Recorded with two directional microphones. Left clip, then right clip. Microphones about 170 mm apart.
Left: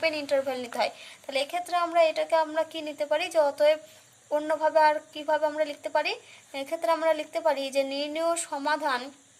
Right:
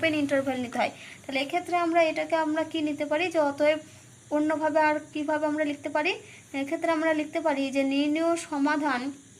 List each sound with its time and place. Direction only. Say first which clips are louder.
0.0 s a woman's voice: right 1 dB; 30° left (ahead or behind)